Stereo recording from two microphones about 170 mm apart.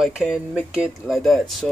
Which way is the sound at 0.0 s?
Centre (ahead or behind).